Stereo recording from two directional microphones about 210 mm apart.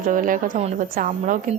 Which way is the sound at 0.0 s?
40° right (ahead or behind).